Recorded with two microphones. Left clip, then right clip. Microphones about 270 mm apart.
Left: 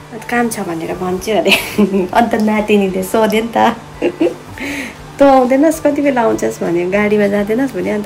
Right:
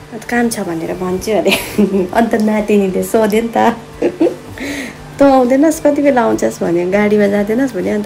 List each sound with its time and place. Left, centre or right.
0.3 s a woman's voice: centre